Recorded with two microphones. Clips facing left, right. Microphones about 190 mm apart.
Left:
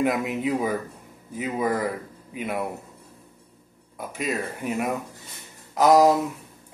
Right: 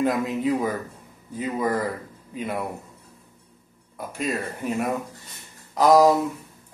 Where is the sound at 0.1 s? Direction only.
15° left (ahead or behind).